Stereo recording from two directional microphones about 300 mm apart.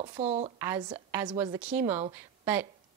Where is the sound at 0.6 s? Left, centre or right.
Centre.